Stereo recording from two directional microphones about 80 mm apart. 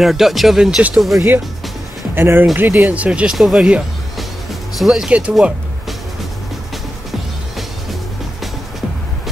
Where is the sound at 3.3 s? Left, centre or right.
Centre.